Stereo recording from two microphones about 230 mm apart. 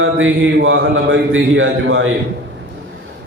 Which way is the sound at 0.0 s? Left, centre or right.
Right.